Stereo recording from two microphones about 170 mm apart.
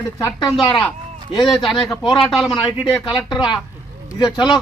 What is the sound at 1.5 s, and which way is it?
Speech, centre (ahead or behind).